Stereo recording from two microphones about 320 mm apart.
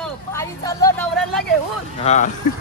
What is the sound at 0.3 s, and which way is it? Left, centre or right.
A woman's voice, centre.